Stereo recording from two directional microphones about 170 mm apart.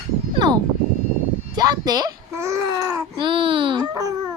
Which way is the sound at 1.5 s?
25° right (ahead or behind).